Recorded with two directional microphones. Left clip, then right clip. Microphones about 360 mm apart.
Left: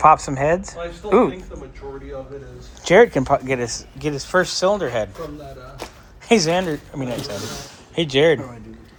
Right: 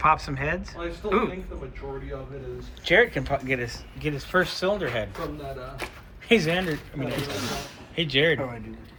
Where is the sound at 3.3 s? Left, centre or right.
Left.